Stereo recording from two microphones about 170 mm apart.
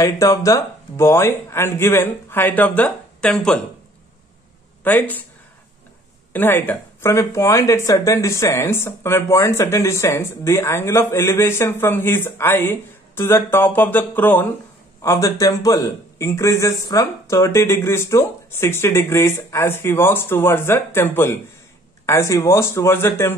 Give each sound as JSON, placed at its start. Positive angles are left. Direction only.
{"t": 0.0, "sound": "speech", "side_deg": 20}
{"t": 4.8, "sound": "speech", "side_deg": 10}
{"t": 6.3, "sound": "speech", "side_deg": 10}